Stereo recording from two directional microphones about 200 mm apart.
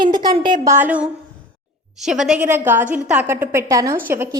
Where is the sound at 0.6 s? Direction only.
10° right (ahead or behind).